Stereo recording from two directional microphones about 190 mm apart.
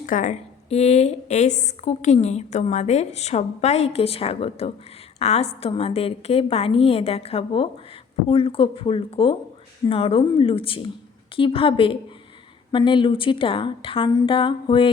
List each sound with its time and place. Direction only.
0.0 s a woman's voice: 45° left (ahead or behind); by 14.8 s 25° left (ahead or behind)